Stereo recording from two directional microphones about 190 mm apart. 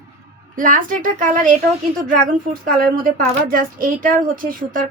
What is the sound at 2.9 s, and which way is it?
A woman's voice, 45° right (ahead or behind).